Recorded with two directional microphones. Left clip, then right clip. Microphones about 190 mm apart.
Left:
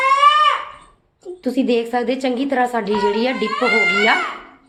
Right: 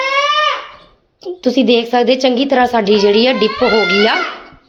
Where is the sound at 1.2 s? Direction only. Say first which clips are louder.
Right 7 dB; 30° right (ahead or behind).